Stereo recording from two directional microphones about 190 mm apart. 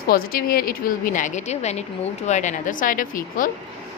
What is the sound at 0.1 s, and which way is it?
A woman's voice, 50° left (ahead or behind).